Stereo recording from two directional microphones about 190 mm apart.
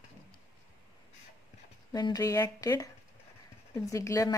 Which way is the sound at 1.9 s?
20° left (ahead or behind).